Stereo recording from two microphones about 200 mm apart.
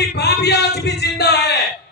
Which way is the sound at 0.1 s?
55° left (ahead or behind).